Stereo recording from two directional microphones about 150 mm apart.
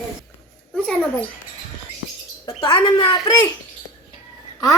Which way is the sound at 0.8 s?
10° left (ahead or behind).